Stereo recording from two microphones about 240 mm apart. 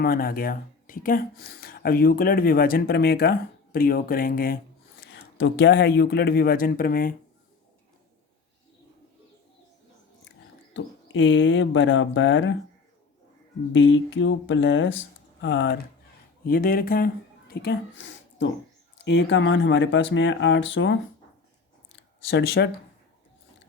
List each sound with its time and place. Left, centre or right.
0.0 s speech: left
5.0 s speech: left
10.8 s speech: left
13.7 s speech: left
22.3 s speech: left